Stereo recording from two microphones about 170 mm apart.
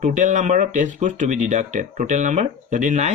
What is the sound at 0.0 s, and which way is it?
Speech, 45° right (ahead or behind).